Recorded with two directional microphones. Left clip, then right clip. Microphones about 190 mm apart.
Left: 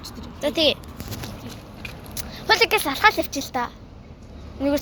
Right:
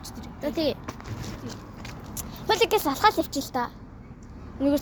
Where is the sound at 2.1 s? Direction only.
15° right (ahead or behind).